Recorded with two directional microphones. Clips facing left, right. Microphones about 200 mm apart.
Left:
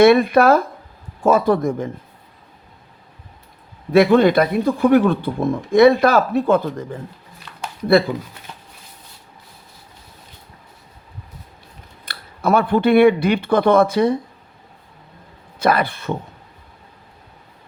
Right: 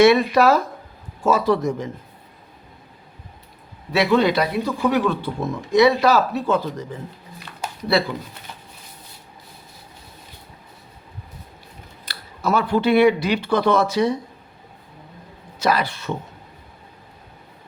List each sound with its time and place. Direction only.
0.0 s speech: 55° left (ahead or behind)
3.9 s speech: 50° left (ahead or behind)
12.0 s speech: 55° left (ahead or behind)
15.5 s speech: 55° left (ahead or behind)